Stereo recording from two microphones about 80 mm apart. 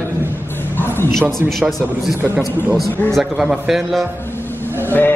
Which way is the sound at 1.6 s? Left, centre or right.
Centre.